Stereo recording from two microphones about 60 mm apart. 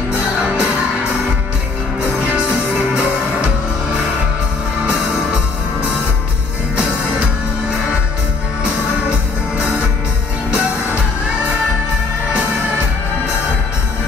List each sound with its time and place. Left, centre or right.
0.2 s music: centre
2.9 s music: centre
9.6 s music: centre